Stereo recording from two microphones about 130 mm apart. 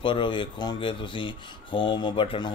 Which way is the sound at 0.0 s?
40° left (ahead or behind).